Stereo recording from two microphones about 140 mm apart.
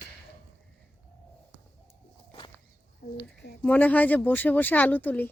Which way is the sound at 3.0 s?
90° left.